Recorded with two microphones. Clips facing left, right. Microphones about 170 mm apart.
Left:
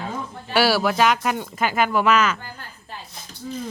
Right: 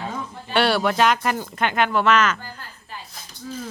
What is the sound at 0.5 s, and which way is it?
Speech, 5° left (ahead or behind).